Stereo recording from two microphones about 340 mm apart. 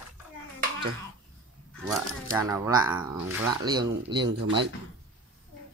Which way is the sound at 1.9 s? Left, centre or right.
Centre.